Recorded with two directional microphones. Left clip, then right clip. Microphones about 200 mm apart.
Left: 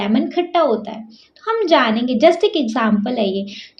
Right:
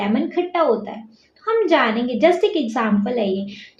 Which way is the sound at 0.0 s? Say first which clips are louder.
Left 2 dB; 45° left (ahead or behind).